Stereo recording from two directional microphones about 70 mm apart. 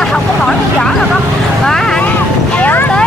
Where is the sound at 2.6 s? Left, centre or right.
Left.